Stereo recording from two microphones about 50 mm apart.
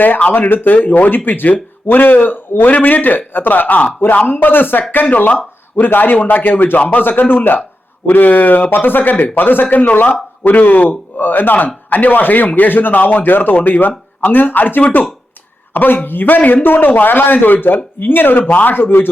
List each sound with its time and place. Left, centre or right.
0.2 s a man's voice: left